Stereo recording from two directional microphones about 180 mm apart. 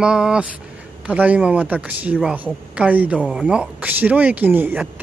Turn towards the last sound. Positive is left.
turn(degrees=-10)  # may be behind; listen again after turning